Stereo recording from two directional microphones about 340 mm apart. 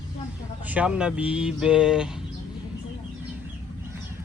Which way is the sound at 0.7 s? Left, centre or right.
Centre.